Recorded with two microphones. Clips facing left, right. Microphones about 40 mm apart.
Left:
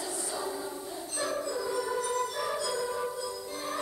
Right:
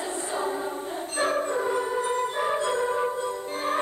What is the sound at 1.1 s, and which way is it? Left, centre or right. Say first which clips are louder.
Music: right 7 dB; right.